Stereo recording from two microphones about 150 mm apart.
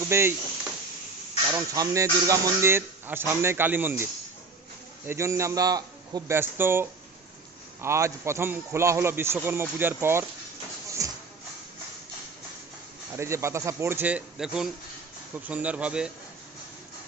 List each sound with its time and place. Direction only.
0.1 s speech: 15° right (ahead or behind)
1.5 s a man's voice: 25° right (ahead or behind)
11.0 s music: 20° right (ahead or behind)
13.1 s speech: 20° right (ahead or behind)